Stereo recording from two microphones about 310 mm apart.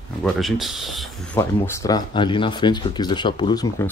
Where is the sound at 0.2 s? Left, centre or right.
Centre.